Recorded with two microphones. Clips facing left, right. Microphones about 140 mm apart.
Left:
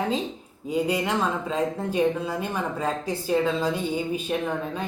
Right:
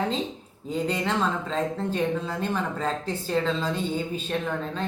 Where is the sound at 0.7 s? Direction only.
10° left (ahead or behind).